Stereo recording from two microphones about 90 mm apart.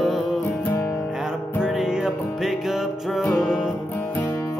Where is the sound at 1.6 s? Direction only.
5° right (ahead or behind).